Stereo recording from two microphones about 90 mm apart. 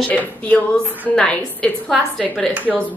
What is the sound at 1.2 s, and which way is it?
A woman's voice, 15° left (ahead or behind).